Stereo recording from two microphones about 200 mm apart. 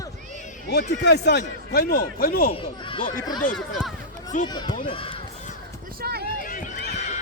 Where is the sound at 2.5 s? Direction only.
25° left (ahead or behind).